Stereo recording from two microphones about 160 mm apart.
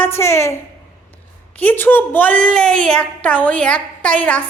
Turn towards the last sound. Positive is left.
turn(degrees=10)  # may be behind; listen again after turning